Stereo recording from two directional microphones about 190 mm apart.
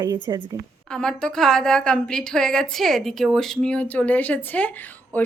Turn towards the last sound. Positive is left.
turn(degrees=10)  # may be behind; listen again after turning